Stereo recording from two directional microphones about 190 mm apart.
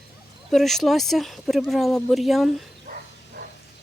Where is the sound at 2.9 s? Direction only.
45° right (ahead or behind).